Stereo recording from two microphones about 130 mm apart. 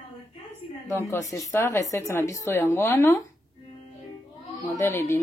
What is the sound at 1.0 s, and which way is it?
Speech, 20° left (ahead or behind).